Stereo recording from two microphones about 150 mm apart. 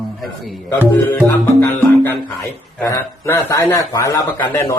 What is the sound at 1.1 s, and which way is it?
Music, 20° left (ahead or behind).